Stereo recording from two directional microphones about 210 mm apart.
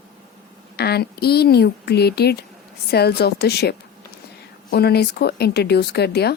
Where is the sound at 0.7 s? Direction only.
50° left (ahead or behind).